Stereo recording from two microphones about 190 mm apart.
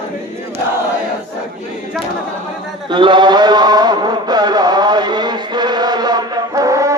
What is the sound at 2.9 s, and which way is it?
Chant, 25° right (ahead or behind).